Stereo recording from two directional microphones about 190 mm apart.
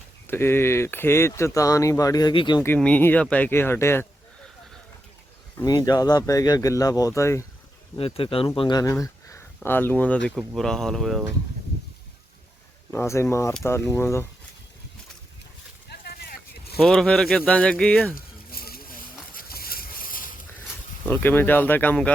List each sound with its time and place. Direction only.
0.3 s speech: 10° left (ahead or behind)
2.6 s speech: 10° left (ahead or behind)
5.5 s speech: 20° left (ahead or behind)
7.9 s speech: 30° left (ahead or behind); by 11.2 s centre (ahead or behind)
12.9 s speech: 15° left (ahead or behind)
15.9 s a sound: 55° left (ahead or behind)
16.7 s speech: centre (ahead or behind)
18.5 s vehicle: 50° left (ahead or behind)
19.3 s a sound: 50° left (ahead or behind)
21.1 s speech: 10° left (ahead or behind)